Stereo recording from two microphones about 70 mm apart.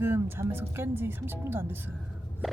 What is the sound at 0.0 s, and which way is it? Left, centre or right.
Speech, right.